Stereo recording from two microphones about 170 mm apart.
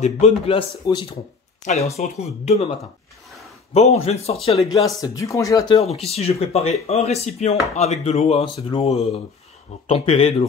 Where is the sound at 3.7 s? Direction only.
40° left (ahead or behind).